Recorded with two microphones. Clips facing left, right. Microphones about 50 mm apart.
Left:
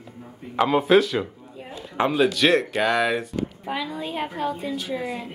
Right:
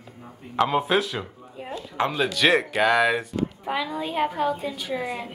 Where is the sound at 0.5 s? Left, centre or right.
Centre.